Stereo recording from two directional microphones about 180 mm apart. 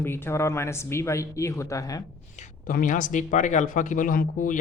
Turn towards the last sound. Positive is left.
turn(degrees=50)  # may be behind; listen again after turning